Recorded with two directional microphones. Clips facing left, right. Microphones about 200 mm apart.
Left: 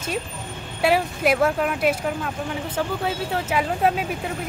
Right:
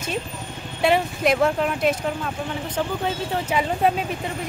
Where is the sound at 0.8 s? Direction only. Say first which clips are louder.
Even; 5° left (ahead or behind).